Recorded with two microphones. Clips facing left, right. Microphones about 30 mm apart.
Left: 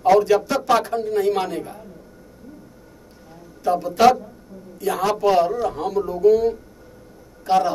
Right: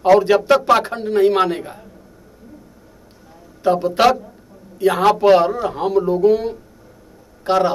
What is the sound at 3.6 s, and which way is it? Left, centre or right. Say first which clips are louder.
Speech: right 2 dB; right.